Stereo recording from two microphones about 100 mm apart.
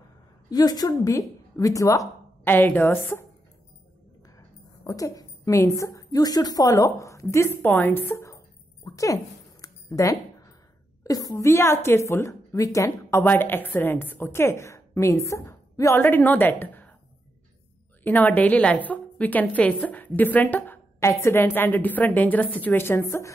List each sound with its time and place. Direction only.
0.5 s a woman's voice: 40° left (ahead or behind)
2.4 s a woman's voice: 20° left (ahead or behind)
4.8 s a woman's voice: 35° left (ahead or behind); by 8.2 s 20° left (ahead or behind)
8.8 s a sound: 35° left (ahead or behind)
11.1 s a woman's voice: 35° left (ahead or behind)
13.2 s a woman's voice: 20° left (ahead or behind)
16.0 s a woman's voice: 20° left (ahead or behind)
18.0 s a woman's voice: 15° left (ahead or behind)